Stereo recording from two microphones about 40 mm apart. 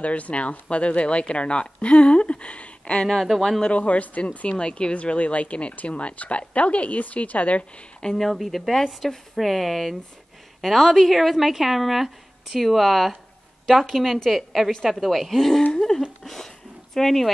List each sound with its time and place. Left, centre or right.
0.0 s speech: left
3.1 s speech: centre
3.6 s speech: left
4.5 s speech: left
8.0 s speech: left
8.5 s speech: centre
15.7 s a sound: centre
16.9 s speech: centre